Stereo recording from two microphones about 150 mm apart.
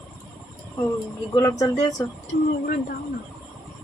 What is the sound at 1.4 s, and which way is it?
Speech, 20° left (ahead or behind).